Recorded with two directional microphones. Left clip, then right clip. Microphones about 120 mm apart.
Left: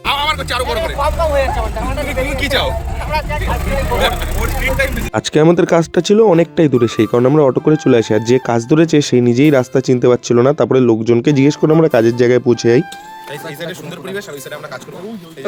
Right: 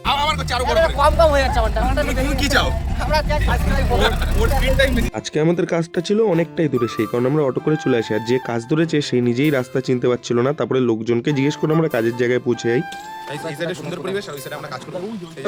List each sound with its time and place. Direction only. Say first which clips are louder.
0.0 s speech: left 3 dB; 15° right (ahead or behind)
5.1 s speech: left 8 dB; 55° left (ahead or behind); by 12.8 s 40° left (ahead or behind)